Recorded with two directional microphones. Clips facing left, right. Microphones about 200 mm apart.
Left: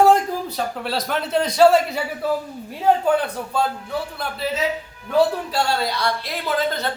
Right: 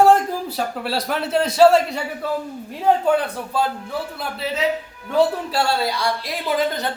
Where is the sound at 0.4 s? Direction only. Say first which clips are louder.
Right 1 dB; 5° right (ahead or behind).